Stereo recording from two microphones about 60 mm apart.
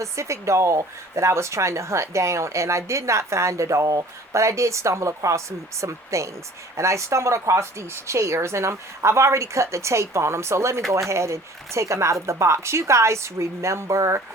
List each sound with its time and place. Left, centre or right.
0.0 s speech: right